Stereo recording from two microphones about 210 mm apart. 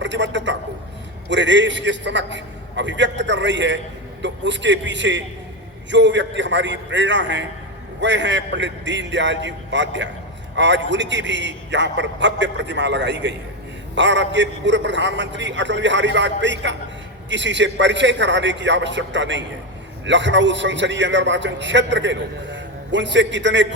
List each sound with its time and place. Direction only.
0.0 s a man's voice: 60° right (ahead or behind)